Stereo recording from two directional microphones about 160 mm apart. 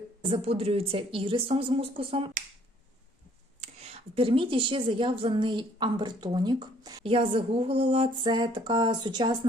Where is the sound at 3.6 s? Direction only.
40° right (ahead or behind).